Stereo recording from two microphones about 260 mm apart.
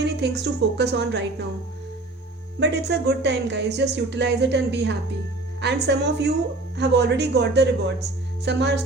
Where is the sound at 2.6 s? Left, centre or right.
Right.